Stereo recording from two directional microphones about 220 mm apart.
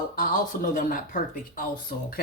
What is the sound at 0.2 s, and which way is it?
Speech, 40° left (ahead or behind).